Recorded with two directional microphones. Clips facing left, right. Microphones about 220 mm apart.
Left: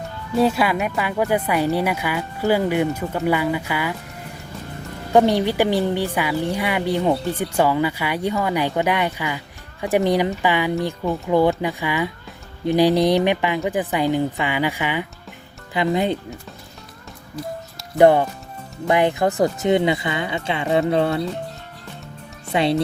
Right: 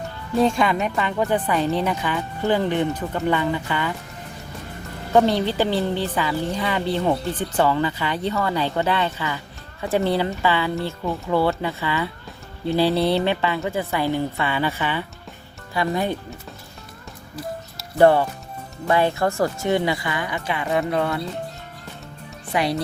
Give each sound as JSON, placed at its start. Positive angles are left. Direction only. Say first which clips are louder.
{"t": 0.3, "sound": "speech", "louder": "left 1 dB", "side_deg": 5}
{"t": 5.1, "sound": "speech", "louder": "left 2 dB", "side_deg": 15}
{"t": 17.9, "sound": "speech", "louder": "left 2 dB", "side_deg": 15}
{"t": 22.5, "sound": "speech", "louder": "left 3 dB", "side_deg": 25}